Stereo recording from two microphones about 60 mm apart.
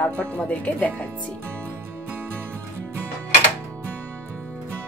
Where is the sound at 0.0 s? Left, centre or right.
Left.